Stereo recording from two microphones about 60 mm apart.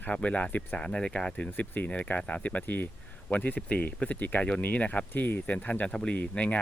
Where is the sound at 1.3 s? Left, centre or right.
Left.